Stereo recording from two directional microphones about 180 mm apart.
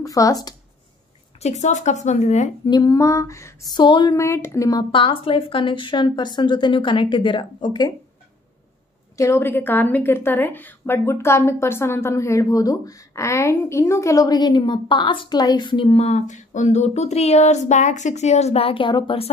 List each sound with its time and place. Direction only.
0.0 s a woman's voice: 20° left (ahead or behind)
1.4 s a woman's voice: 40° left (ahead or behind)
2.6 s a woman's voice: 25° left (ahead or behind)
9.1 s a woman's voice: 15° left (ahead or behind)